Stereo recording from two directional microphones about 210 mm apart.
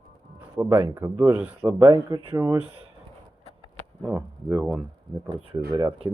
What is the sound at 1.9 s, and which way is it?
Speech, 20° right (ahead or behind).